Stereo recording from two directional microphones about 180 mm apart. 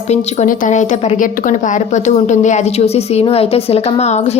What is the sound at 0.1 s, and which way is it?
A woman's voice, 45° left (ahead or behind).